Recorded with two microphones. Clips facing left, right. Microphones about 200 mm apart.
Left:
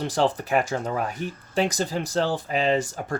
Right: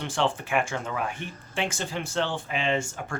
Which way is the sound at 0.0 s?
40° left (ahead or behind).